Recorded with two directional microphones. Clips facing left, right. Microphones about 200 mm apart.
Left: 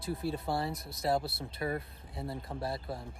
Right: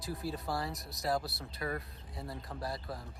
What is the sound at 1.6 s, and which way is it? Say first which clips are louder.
Speech: left 3 dB; 25° left (ahead or behind).